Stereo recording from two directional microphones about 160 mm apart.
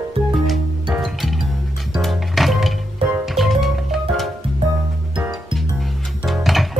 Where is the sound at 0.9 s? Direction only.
Centre (ahead or behind).